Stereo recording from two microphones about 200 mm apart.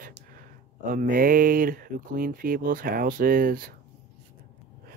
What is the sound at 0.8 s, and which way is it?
Speech, 45° right (ahead or behind).